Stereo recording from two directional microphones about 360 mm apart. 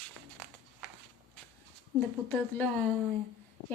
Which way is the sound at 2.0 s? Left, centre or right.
Centre.